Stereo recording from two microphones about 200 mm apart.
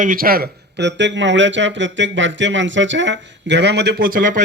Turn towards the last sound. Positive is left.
turn(degrees=-45)  # may be behind; listen again after turning